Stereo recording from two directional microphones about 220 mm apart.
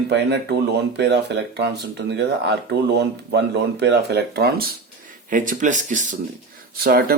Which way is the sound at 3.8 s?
50° right (ahead or behind).